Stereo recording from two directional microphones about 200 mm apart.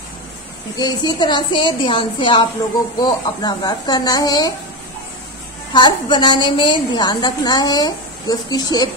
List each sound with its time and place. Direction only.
0.7 s a woman's voice: 20° left (ahead or behind)
5.7 s a woman's voice: 20° left (ahead or behind)